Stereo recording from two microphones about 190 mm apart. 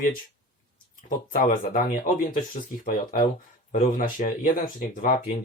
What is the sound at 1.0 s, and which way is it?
Speech, 45° left (ahead or behind).